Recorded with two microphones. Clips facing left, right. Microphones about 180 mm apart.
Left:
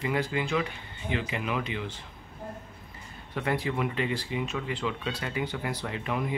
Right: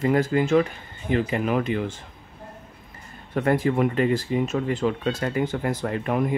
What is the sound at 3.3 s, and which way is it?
Speech, 45° right (ahead or behind).